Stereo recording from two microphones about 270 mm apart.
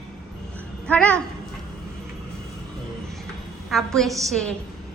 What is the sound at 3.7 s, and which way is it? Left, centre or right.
Speech, centre.